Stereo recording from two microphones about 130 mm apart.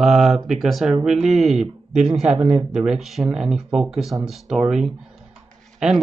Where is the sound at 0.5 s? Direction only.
Centre (ahead or behind).